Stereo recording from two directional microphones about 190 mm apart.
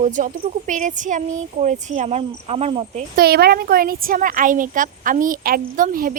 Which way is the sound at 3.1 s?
55° right (ahead or behind).